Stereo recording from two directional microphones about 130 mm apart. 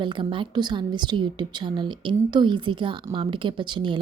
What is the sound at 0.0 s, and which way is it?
A woman's voice, 40° right (ahead or behind).